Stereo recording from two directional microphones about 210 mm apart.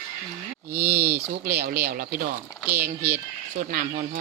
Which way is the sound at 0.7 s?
10° right (ahead or behind).